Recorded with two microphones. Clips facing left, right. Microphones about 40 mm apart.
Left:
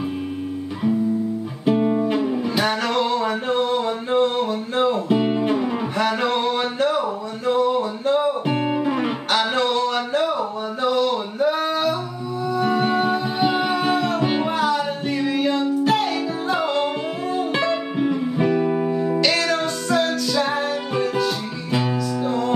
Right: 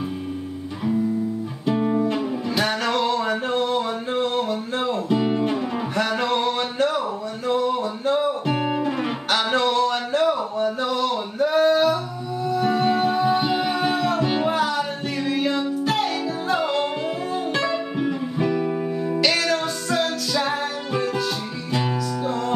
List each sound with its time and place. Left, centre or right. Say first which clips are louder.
1.7 s music: left 2 dB; centre
19.2 s music: left 1 dB; centre